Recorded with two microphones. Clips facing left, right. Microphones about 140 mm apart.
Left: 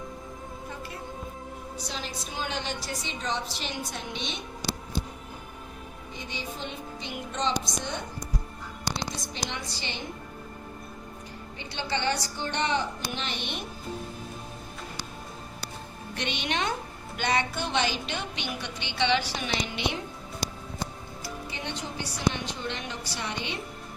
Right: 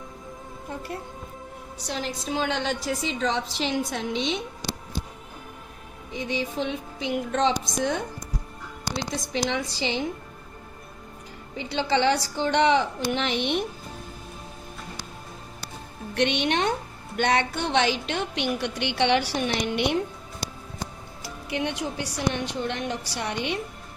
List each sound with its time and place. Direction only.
1.9 s a woman's voice: 80° right
6.1 s a woman's voice: 90° right
9.3 s a woman's voice: 90° right
11.5 s a woman's voice: 90° right
16.1 s a woman's voice: 70° right (ahead or behind)
21.5 s a woman's voice: 75° right (ahead or behind)
22.3 s a woman's voice: 60° right (ahead or behind)